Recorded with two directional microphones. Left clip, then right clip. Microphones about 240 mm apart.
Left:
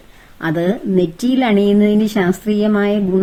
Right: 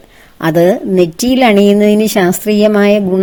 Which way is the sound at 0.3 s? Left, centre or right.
Right.